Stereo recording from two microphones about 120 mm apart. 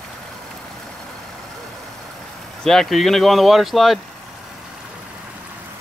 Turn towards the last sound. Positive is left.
turn(degrees=0)  # may be behind; listen again after turning